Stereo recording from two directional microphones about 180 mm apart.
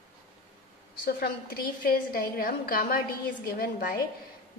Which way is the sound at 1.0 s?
55° left (ahead or behind).